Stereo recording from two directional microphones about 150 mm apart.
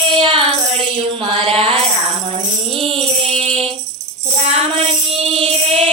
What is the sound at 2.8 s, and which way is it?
Music, 40° right (ahead or behind).